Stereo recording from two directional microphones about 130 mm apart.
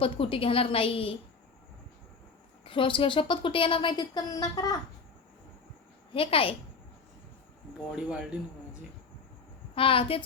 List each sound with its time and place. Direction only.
0.0 s a woman's voice: 45° left (ahead or behind)
2.6 s a woman's voice: 40° left (ahead or behind)
6.1 s a woman's voice: 45° left (ahead or behind)
7.9 s speech: 10° right (ahead or behind)
9.7 s a woman's voice: 45° left (ahead or behind)